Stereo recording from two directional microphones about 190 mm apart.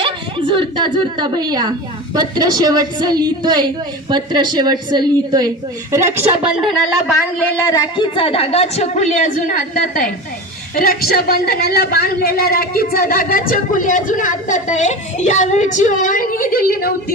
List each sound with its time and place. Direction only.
0.0 s a woman's voice: 25° right (ahead or behind)
6.4 s a woman's voice: 5° right (ahead or behind)
7.6 s a woman's voice: 20° left (ahead or behind); by 16.9 s 50° left (ahead or behind)